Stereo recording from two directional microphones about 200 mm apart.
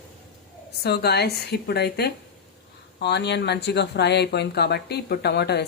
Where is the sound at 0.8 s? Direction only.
55° left (ahead or behind).